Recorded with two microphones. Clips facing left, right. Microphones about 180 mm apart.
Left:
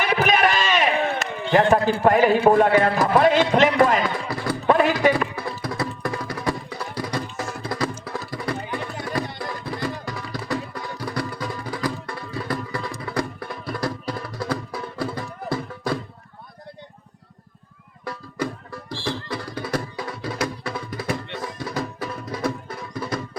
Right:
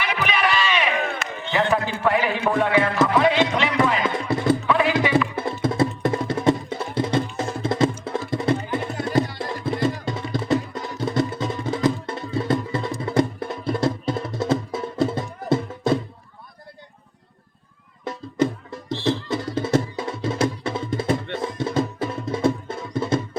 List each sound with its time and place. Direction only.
0.0 s run: 45° left (ahead or behind)
1.5 s a man's voice: 50° left (ahead or behind)
4.3 s clip-clop: 25° right (ahead or behind)
4.6 s music: 45° left (ahead or behind)
5.4 s music: 25° right (ahead or behind)
18.0 s music: 25° right (ahead or behind)